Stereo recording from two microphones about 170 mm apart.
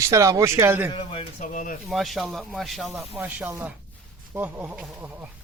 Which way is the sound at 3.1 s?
10° right (ahead or behind).